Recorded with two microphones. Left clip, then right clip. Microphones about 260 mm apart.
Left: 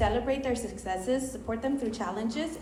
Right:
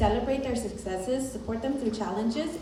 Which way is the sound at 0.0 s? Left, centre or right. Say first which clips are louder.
Right 1 dB; centre.